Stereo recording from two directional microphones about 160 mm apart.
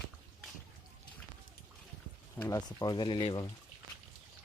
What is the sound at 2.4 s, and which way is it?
Speech, 25° left (ahead or behind).